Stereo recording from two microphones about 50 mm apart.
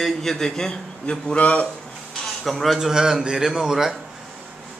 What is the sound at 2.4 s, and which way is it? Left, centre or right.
Speech, centre.